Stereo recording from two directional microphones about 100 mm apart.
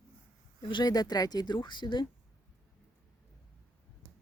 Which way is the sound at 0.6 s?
50° left (ahead or behind).